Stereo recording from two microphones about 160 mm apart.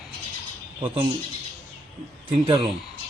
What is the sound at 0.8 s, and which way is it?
Speech, 30° right (ahead or behind).